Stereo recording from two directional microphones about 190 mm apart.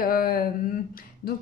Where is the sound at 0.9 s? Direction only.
50° left (ahead or behind).